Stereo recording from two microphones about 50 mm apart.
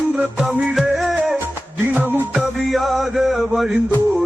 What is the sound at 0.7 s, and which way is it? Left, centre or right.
Music, centre.